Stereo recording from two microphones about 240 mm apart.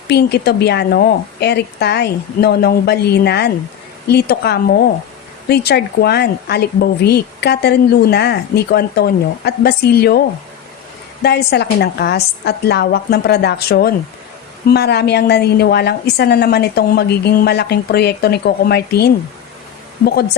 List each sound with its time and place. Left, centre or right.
0.1 s a woman's voice: left
11.2 s a woman's voice: left